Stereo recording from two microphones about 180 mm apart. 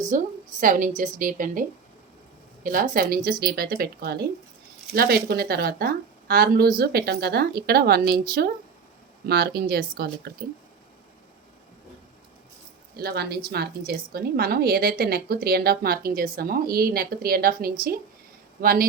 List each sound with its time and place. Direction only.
0.1 s a woman's voice: 50° right (ahead or behind)
2.6 s a woman's voice: 50° right (ahead or behind)
13.0 s a woman's voice: 60° right (ahead or behind)